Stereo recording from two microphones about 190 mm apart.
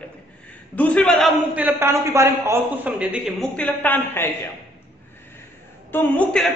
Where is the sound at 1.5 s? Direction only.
10° right (ahead or behind); by 4.3 s 10° left (ahead or behind).